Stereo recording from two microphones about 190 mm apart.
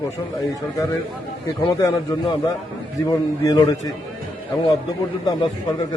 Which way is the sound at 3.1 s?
20° left (ahead or behind).